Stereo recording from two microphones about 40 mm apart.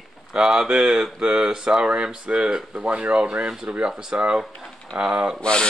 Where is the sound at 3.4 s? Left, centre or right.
Centre.